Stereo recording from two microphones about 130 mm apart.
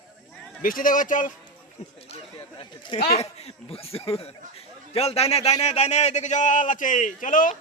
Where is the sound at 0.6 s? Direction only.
90° left.